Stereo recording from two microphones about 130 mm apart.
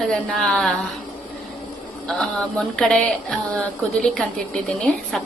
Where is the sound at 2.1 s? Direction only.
5° left (ahead or behind).